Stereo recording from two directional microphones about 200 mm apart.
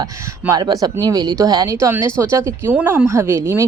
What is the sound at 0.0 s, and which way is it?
A woman's voice, 15° right (ahead or behind).